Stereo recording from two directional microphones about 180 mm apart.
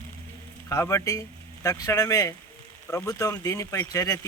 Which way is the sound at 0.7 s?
15° left (ahead or behind).